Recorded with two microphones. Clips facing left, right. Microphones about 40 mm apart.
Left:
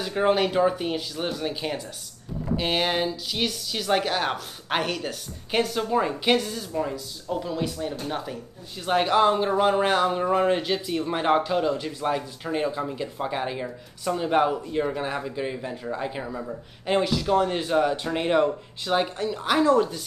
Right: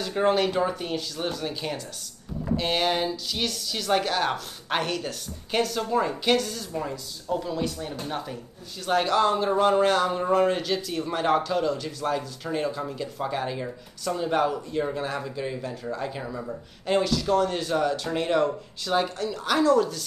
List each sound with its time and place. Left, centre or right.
0.0 s speech: centre
8.8 s speech: centre